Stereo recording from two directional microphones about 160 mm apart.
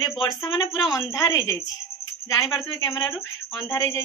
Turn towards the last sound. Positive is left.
turn(degrees=20)  # may be behind; listen again after turning